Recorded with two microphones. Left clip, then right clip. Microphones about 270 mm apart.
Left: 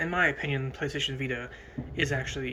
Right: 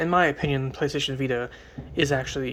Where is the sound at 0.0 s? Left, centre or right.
Centre.